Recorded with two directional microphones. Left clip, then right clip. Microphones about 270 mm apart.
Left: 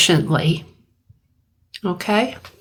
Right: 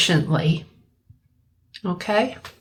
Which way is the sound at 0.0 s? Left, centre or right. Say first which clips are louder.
Left 4 dB; left.